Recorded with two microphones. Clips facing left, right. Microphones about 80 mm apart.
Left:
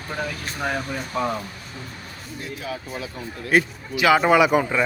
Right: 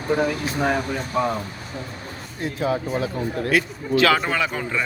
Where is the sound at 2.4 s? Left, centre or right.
Right.